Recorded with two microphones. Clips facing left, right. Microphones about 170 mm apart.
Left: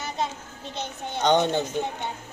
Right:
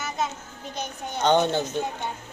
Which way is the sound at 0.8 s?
20° left (ahead or behind).